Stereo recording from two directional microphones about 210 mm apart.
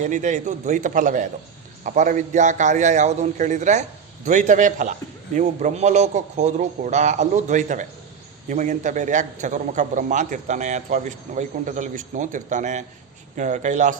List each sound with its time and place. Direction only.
0.0 s a man's voice: 35° right (ahead or behind)